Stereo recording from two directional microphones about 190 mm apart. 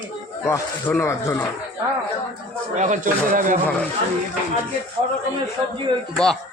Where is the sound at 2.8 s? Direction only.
40° right (ahead or behind).